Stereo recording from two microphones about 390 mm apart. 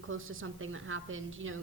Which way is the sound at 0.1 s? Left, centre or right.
Right.